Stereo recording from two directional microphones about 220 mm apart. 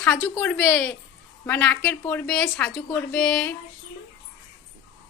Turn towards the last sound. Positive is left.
turn(degrees=5)  # may be behind; listen again after turning